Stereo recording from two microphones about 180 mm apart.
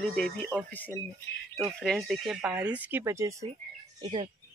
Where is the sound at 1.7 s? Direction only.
Centre (ahead or behind); by 3.3 s 15° right (ahead or behind).